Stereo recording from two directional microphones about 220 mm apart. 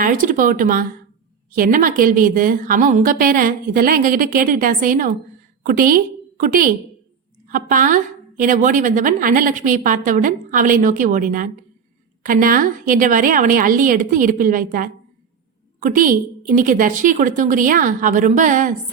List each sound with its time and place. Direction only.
0.0 s a woman's voice: 35° right (ahead or behind)